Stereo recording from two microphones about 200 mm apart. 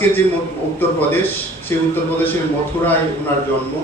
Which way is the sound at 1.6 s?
10° left (ahead or behind).